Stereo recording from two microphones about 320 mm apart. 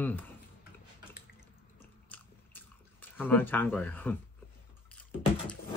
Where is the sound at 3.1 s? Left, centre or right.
Centre.